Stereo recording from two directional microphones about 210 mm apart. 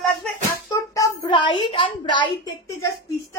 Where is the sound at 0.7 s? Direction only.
15° left (ahead or behind).